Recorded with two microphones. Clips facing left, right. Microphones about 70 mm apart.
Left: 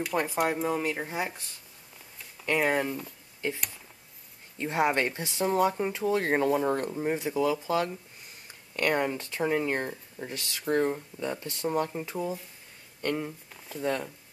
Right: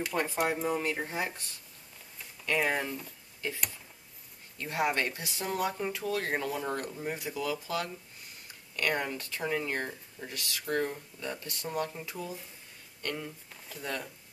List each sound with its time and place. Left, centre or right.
0.0 s speech: centre
2.4 s speech: left
4.6 s speech: left